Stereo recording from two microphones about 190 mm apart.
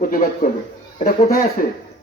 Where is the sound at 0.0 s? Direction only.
50° left (ahead or behind).